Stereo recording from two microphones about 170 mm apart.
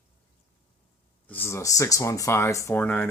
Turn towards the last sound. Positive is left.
turn(degrees=10)  # may be behind; listen again after turning